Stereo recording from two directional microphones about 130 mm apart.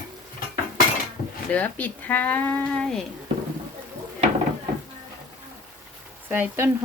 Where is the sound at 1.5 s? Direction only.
10° left (ahead or behind).